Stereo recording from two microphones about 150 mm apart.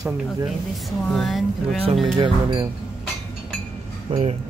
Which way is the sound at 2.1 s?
30° right (ahead or behind).